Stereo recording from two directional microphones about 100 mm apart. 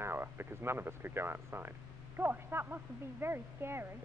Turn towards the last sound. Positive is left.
turn(degrees=-25)  # may be behind; listen again after turning